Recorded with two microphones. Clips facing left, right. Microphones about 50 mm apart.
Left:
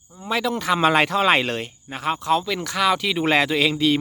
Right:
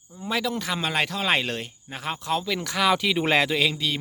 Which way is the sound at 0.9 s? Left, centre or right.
Left.